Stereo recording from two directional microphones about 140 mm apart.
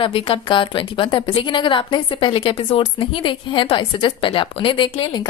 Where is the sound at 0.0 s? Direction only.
40° left (ahead or behind).